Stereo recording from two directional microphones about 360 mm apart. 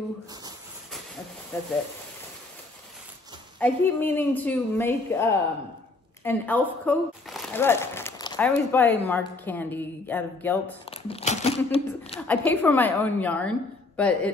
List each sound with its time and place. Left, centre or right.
1.5 s a woman's voice: centre
3.5 s a woman's voice: centre
10.9 s speech: centre
12.3 s a woman's voice: centre